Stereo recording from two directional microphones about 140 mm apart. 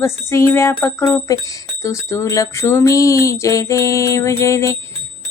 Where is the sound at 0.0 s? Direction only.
20° left (ahead or behind).